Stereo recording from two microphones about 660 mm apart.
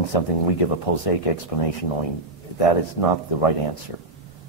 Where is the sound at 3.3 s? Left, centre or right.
Left.